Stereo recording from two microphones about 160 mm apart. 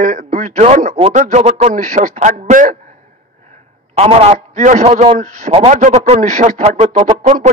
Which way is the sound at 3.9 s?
40° right (ahead or behind).